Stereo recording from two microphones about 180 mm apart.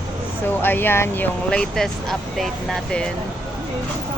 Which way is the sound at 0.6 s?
10° left (ahead or behind).